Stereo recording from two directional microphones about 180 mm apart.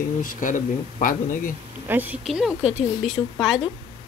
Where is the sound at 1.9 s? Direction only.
10° right (ahead or behind).